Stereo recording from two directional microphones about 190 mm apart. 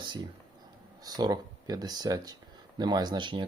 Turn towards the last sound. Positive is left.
turn(degrees=-25)  # may be behind; listen again after turning